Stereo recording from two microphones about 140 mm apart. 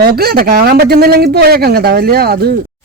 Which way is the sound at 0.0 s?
90° right.